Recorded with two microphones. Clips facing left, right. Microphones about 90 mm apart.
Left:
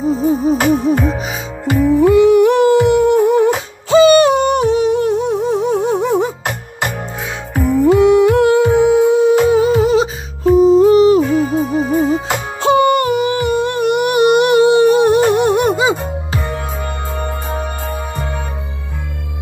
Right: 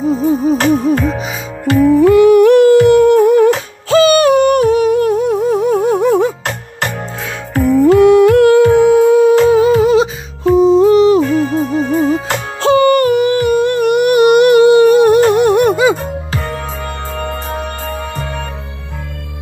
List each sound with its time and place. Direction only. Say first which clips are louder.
0.0 s music: right 1 dB; centre (ahead or behind)
1.6 s music: right 3 dB; 15° left (ahead or behind)
3.3 s humming: right 3 dB; 20° left (ahead or behind)
3.9 s a sound: even; 20° left (ahead or behind)
5.4 s humming: right 3 dB; 25° left (ahead or behind)
5.9 s music: right 4 dB; 20° left (ahead or behind)
9.6 s humming: right 3 dB; 35° left (ahead or behind)
10.5 s music: even; 35° right (ahead or behind)
10.9 s music: right 1 dB; 35° left (ahead or behind)
11.1 s music: right 1 dB; 10° left (ahead or behind)
12.6 s humming: right 2 dB; 20° left (ahead or behind)
16.0 s music: right 1 dB; 10° left (ahead or behind)